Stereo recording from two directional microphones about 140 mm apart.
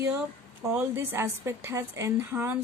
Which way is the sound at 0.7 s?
15° right (ahead or behind).